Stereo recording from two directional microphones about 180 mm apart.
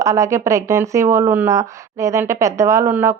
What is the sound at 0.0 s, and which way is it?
A woman's voice, 20° right (ahead or behind).